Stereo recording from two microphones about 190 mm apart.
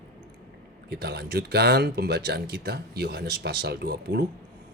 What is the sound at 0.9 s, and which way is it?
A man's voice, 60° right (ahead or behind).